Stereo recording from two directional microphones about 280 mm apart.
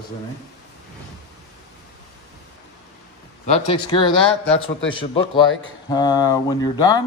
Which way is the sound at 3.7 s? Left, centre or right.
Centre.